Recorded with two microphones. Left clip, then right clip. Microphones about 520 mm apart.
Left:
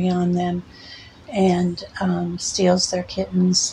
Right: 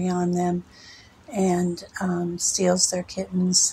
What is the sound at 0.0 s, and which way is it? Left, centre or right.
Speech, right.